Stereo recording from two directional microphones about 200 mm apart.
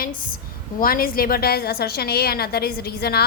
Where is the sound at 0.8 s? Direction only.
45° left (ahead or behind).